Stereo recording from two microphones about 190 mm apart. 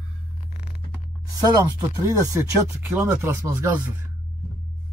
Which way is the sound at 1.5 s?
20° right (ahead or behind).